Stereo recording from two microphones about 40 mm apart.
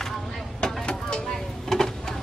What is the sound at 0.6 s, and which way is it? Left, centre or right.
Vehicle, left.